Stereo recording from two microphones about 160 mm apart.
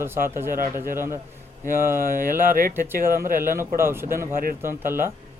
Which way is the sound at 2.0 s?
60° right (ahead or behind).